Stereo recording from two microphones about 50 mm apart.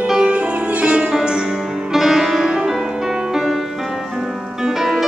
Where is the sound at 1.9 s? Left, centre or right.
Centre.